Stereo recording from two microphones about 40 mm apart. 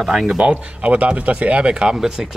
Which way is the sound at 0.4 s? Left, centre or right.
Right.